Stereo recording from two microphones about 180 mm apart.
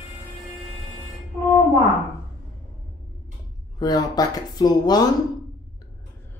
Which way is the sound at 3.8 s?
20° left (ahead or behind).